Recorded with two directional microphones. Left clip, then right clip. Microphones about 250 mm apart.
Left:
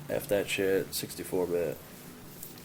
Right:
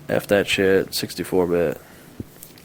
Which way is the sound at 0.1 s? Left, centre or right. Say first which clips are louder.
Right 11 dB; right.